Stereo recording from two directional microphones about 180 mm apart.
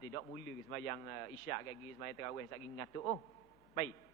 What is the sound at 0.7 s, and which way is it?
A man's voice, 15° left (ahead or behind).